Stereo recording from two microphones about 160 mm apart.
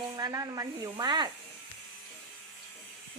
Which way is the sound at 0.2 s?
20° right (ahead or behind).